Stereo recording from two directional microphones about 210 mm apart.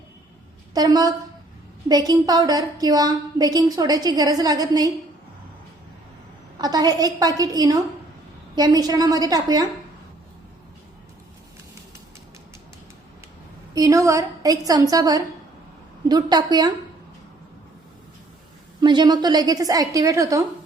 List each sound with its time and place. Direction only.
0.7 s a woman's voice: 20° right (ahead or behind)
6.6 s a woman's voice: 20° right (ahead or behind)
13.7 s a woman's voice: 15° right (ahead or behind)
18.8 s a woman's voice: 20° right (ahead or behind)